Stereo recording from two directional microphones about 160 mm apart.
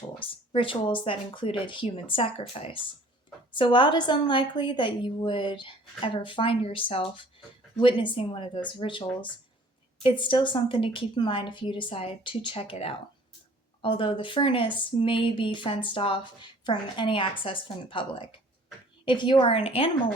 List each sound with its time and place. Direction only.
0.2 s a woman's voice: 35° left (ahead or behind)